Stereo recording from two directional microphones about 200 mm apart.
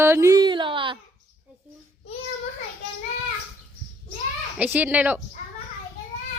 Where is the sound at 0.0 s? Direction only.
15° right (ahead or behind).